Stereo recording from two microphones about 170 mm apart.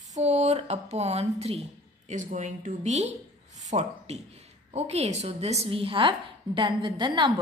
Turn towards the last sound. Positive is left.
turn(degrees=-30)  # may be behind; listen again after turning